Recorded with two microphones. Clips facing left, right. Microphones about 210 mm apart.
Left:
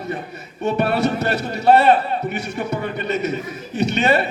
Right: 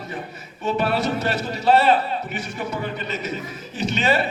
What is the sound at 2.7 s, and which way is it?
A man's voice, 65° left (ahead or behind).